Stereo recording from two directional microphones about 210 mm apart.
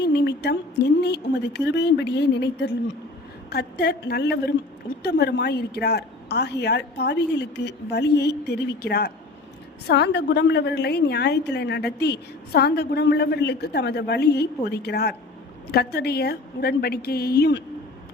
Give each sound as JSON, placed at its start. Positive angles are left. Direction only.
{"t": 0.0, "sound": "a woman's voice", "side_deg": 55}